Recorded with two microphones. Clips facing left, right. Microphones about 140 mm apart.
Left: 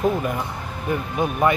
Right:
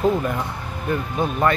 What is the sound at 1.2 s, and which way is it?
Speech, 15° left (ahead or behind).